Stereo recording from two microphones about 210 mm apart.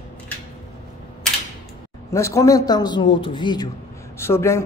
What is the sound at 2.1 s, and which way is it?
A man's voice, 15° left (ahead or behind).